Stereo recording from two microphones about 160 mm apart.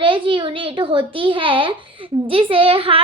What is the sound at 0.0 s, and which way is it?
A child's voice, 30° right (ahead or behind).